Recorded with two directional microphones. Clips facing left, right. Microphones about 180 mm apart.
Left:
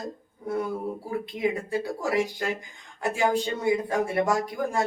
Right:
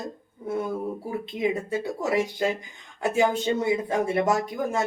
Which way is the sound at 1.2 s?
20° right (ahead or behind).